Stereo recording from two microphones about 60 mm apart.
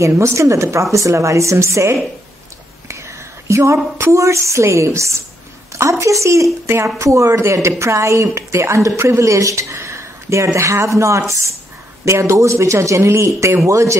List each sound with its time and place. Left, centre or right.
0.0 s a woman's voice: right
3.4 s a woman's voice: right